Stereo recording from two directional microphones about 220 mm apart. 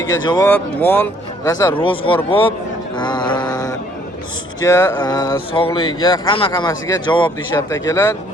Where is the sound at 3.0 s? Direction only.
20° left (ahead or behind).